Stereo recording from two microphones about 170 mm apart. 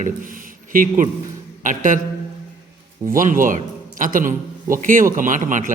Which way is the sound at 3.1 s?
50° right (ahead or behind).